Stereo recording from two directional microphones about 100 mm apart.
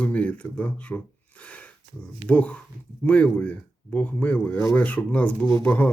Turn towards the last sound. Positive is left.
turn(degrees=10)  # may be behind; listen again after turning